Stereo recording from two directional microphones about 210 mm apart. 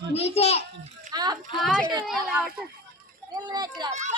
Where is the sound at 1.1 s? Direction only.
20° right (ahead or behind).